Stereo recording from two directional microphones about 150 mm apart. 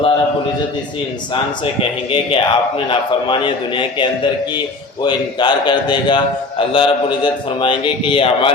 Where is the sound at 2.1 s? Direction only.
35° left (ahead or behind).